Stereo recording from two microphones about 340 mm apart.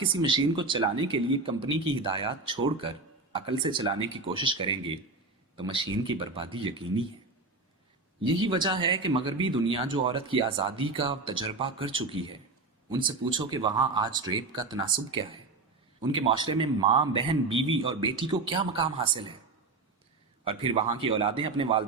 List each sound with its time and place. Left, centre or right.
0.0 s speech: centre
8.2 s speech: centre
20.4 s speech: centre